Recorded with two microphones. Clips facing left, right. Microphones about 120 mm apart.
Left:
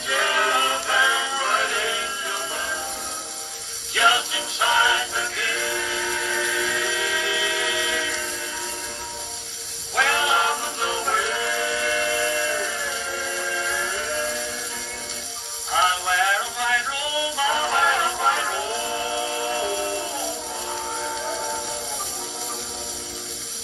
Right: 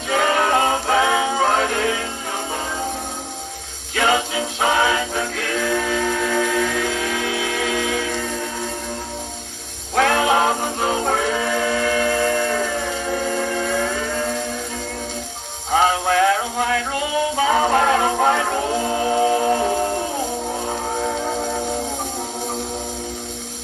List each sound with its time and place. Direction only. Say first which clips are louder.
0.1 s music: right 6 dB; 45° right (ahead or behind)
3.9 s music: right 3 dB; 50° right (ahead or behind)
9.9 s music: right 6 dB; 50° right (ahead or behind)
15.7 s music: right 6 dB; 50° right (ahead or behind)